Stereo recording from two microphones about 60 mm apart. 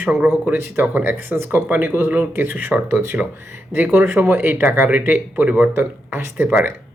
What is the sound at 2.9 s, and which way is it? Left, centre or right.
Speech, right.